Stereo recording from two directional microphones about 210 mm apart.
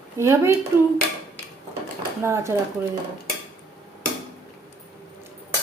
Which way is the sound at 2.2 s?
10° right (ahead or behind).